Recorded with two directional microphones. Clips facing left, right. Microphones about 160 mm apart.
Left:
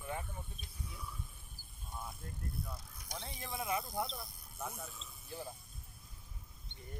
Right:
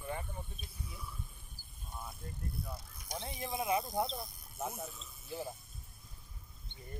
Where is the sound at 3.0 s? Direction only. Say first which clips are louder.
Right 5 dB; 15° right (ahead or behind).